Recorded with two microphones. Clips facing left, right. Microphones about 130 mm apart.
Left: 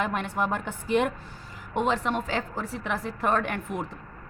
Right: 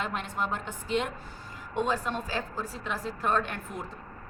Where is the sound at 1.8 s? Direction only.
75° left (ahead or behind).